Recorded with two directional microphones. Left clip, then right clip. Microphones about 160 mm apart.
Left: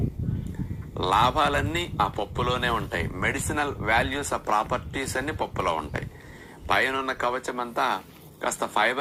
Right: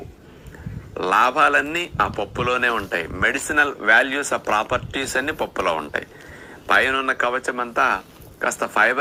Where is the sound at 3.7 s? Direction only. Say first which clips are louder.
Right 5 dB; 10° left (ahead or behind).